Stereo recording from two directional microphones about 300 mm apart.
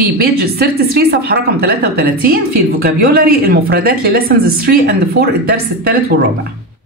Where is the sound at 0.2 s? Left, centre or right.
Right.